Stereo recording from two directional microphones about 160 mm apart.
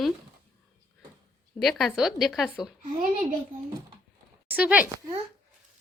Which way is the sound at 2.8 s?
55° right (ahead or behind).